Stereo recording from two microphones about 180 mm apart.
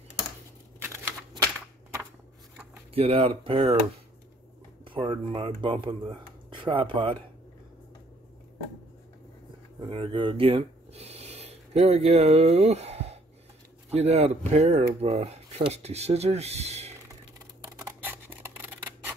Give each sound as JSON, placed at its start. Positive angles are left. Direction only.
{"t": 0.7, "sound": "shuffling cards", "side_deg": -10}
{"t": 2.9, "sound": "speech", "side_deg": -35}
{"t": 4.8, "sound": "speech", "side_deg": -30}
{"t": 9.8, "sound": "speech", "side_deg": -30}
{"t": 17.6, "sound": "scissors", "side_deg": -15}